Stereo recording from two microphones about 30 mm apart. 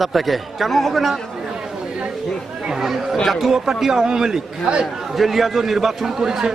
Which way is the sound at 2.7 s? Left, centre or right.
Centre.